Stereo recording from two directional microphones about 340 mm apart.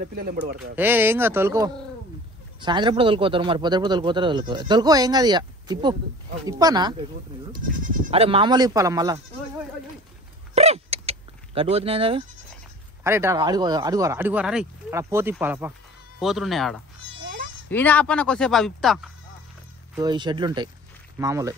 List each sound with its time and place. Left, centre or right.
0.0 s speech: right
0.7 s a man's voice: centre
10.5 s bleat: centre
13.0 s a man's voice: centre
20.0 s a man's voice: centre